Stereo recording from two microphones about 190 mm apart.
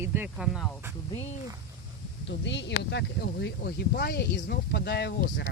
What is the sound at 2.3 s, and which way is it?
Speech, 70° left (ahead or behind).